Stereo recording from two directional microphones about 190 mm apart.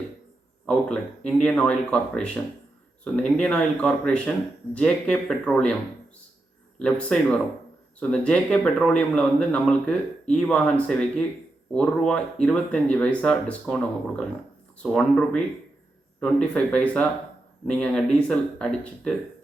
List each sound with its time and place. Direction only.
0.6 s speech: 5° left (ahead or behind)
6.7 s speech: 5° left (ahead or behind)